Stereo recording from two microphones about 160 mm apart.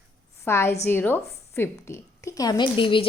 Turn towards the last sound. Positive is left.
turn(degrees=30)  # may be behind; listen again after turning